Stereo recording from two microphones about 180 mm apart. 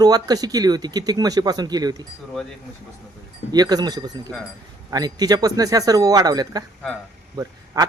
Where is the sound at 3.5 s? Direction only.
20° right (ahead or behind).